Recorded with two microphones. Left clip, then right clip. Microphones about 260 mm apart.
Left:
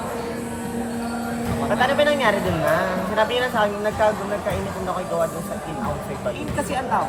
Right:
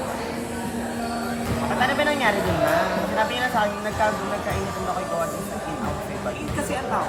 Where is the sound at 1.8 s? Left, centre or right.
Centre.